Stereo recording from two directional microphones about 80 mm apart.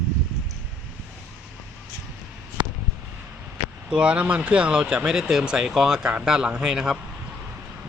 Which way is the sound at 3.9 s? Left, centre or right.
Centre.